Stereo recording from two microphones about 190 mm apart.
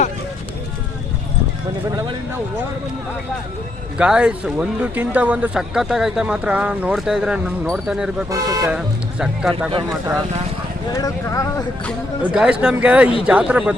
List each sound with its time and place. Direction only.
3.9 s speech: 5° right (ahead or behind)
8.3 s speech: 15° right (ahead or behind)
8.7 s speech: 5° right (ahead or behind)
10.9 s speech: 15° left (ahead or behind)
12.2 s speech: 5° right (ahead or behind)